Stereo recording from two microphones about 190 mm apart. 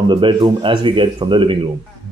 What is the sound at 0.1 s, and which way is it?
A man's voice, 25° right (ahead or behind).